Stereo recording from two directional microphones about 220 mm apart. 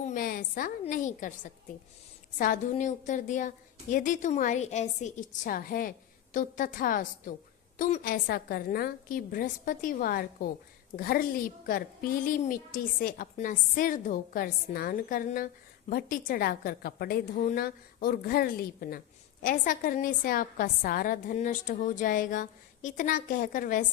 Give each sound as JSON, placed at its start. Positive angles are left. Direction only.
{"t": 0.0, "sound": "a woman's voice", "side_deg": 40}